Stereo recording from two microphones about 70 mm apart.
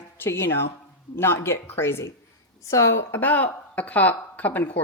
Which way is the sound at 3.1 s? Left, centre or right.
Left.